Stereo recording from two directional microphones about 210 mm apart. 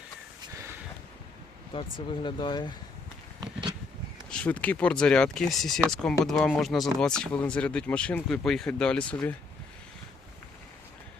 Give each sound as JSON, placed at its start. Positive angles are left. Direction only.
{"t": 1.7, "sound": "speech", "side_deg": 25}
{"t": 3.4, "sound": "a sound", "side_deg": -20}
{"t": 4.3, "sound": "speech", "side_deg": 5}